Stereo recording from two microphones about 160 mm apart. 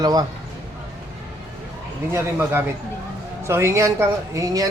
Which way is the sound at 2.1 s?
15° right (ahead or behind).